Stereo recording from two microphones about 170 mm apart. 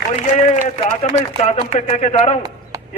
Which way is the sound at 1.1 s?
40° left (ahead or behind).